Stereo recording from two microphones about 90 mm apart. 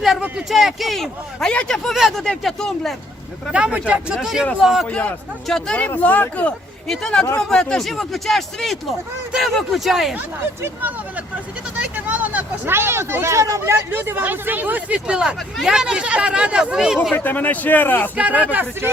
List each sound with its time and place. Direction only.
0.2 s speech: 5° right (ahead or behind)
3.5 s speech: 10° right (ahead or behind)
4.9 s speech: 15° left (ahead or behind)
6.8 s speech: 5° left (ahead or behind)
11.8 s speech: 20° right (ahead or behind)
17.2 s a man's voice: 20° left (ahead or behind)
18.2 s speech: 15° right (ahead or behind)